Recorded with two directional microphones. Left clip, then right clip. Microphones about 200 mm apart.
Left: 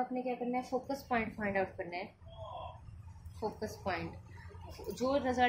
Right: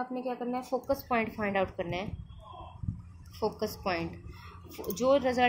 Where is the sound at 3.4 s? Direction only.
40° right (ahead or behind).